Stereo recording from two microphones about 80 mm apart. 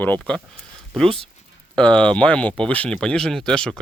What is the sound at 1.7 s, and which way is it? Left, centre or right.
Speech, centre.